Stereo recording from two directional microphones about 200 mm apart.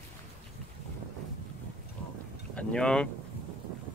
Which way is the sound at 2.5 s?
5° left (ahead or behind).